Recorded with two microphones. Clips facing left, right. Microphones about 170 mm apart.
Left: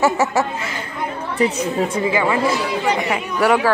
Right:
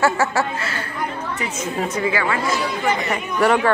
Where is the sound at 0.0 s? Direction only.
20° left (ahead or behind).